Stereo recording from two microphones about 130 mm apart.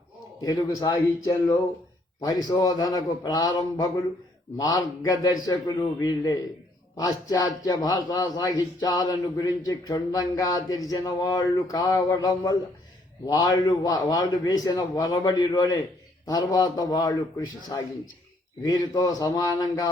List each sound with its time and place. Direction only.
0.4 s a man's voice: 30° left (ahead or behind)